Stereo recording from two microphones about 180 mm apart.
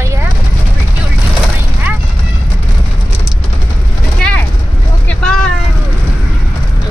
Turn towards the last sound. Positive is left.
turn(degrees=5)  # may be behind; listen again after turning